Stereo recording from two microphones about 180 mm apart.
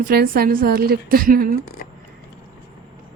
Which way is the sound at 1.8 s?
50° left (ahead or behind).